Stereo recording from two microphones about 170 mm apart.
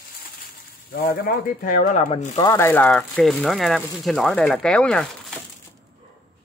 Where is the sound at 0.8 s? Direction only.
60° left (ahead or behind).